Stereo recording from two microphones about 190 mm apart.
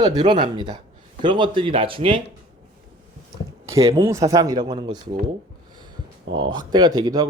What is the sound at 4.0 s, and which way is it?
A man's voice, 15° right (ahead or behind).